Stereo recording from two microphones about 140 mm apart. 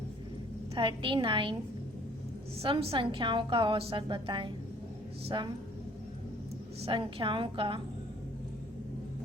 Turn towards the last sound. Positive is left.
turn(degrees=-35)  # may be behind; listen again after turning